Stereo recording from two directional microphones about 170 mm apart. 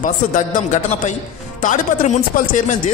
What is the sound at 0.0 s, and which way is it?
A man's voice, 45° left (ahead or behind).